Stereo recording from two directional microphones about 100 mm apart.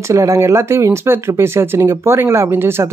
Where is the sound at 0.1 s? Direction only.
30° right (ahead or behind).